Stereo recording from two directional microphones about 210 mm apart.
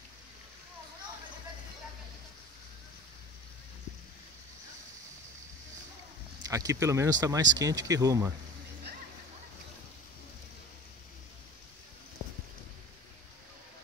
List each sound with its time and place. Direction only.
6.4 s speech: 15° right (ahead or behind)